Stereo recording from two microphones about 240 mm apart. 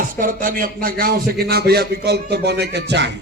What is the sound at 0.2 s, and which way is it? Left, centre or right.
A man's voice, right.